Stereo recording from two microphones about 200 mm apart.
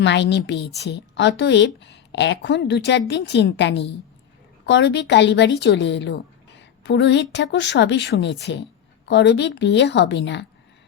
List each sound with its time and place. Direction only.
0.0 s a woman's voice: 60° left (ahead or behind)